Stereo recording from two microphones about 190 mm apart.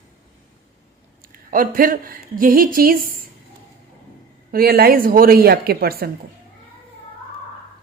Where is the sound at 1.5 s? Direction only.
45° right (ahead or behind).